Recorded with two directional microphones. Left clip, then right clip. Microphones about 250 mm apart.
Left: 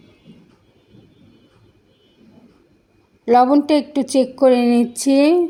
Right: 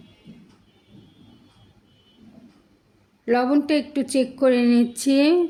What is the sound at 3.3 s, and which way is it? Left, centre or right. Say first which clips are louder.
A woman's voice: left 7 dB; centre.